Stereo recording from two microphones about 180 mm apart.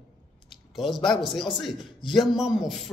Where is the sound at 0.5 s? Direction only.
Centre (ahead or behind).